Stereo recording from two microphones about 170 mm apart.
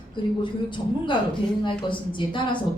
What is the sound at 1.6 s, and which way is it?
Speech, 30° left (ahead or behind).